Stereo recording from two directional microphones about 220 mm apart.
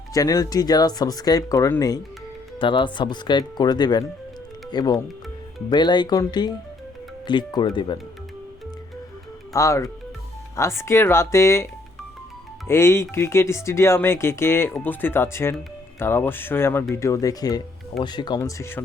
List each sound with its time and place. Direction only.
0.1 s speech: 15° left (ahead or behind)
9.5 s speech: 15° left (ahead or behind)